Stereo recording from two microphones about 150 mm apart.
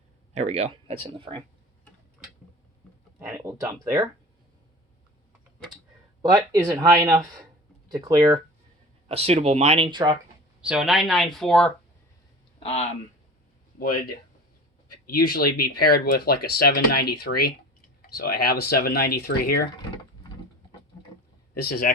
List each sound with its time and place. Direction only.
0.3 s speech: 45° right (ahead or behind)
3.2 s speech: 15° right (ahead or behind)
6.2 s speech: 25° right (ahead or behind)
9.0 s speech: 45° right (ahead or behind)
10.6 s speech: 5° right (ahead or behind)
12.5 s speech: 45° left (ahead or behind)
13.7 s speech: 80° left
21.6 s speech: 70° left (ahead or behind)